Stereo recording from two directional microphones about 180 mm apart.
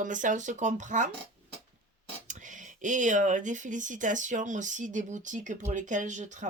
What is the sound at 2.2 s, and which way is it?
Speech, 45° right (ahead or behind).